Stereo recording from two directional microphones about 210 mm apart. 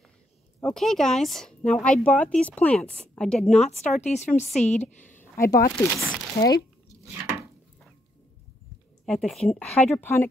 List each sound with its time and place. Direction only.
0.7 s speech: centre (ahead or behind)
3.8 s speech: 30° left (ahead or behind)
5.1 s a sound: 10° left (ahead or behind)
5.8 s speech: centre (ahead or behind)
9.0 s speech: centre (ahead or behind)